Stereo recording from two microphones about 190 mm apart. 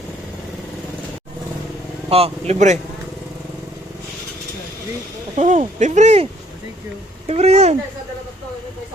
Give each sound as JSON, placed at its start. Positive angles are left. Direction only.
{"t": 2.0, "sound": "speech", "side_deg": -30}
{"t": 5.4, "sound": "speech", "side_deg": -40}
{"t": 7.3, "sound": "speech", "side_deg": -35}